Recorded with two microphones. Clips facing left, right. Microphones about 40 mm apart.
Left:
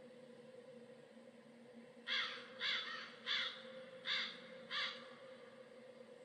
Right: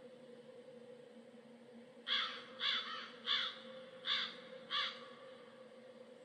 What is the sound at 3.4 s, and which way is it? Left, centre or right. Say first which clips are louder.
Crow: right 1 dB; centre.